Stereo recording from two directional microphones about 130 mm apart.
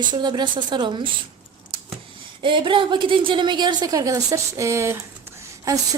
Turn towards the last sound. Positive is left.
turn(degrees=-25)  # may be behind; listen again after turning